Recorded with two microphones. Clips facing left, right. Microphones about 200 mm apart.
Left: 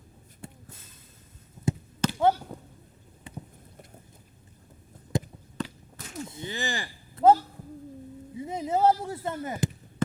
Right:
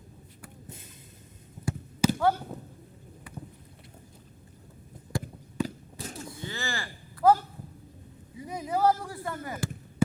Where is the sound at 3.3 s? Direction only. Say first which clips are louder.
Left 2 dB; 25° left (ahead or behind).